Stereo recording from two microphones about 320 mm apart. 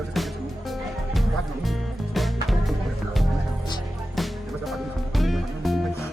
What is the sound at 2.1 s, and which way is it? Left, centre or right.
Music, centre.